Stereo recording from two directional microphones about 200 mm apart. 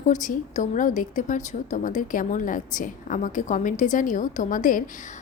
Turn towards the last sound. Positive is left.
turn(degrees=40)  # may be behind; listen again after turning